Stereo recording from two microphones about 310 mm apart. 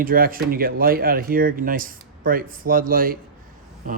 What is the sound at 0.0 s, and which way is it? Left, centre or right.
Speech, right.